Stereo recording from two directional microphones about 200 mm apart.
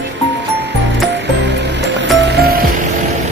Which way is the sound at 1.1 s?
60° right (ahead or behind).